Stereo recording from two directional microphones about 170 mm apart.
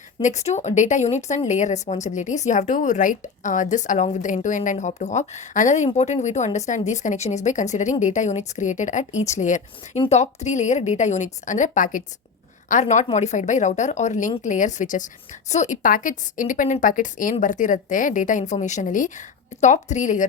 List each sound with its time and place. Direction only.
0.2 s a woman's voice: 45° left (ahead or behind)